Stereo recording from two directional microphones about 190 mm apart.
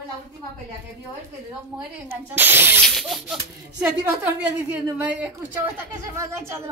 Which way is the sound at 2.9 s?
Centre (ahead or behind).